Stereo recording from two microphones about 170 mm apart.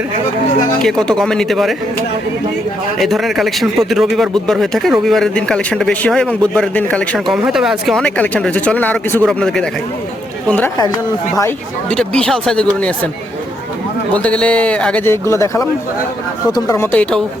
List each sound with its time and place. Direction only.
0.8 s a man's voice: 5° left (ahead or behind)
3.0 s a man's voice: centre (ahead or behind)
11.3 s a man's voice: 10° left (ahead or behind)
14.1 s a man's voice: 10° left (ahead or behind)